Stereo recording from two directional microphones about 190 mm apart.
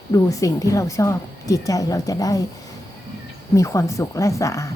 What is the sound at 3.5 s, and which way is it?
A woman's voice, 15° left (ahead or behind).